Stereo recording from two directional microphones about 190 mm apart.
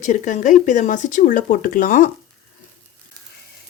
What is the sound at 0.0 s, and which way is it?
Speech, 40° left (ahead or behind).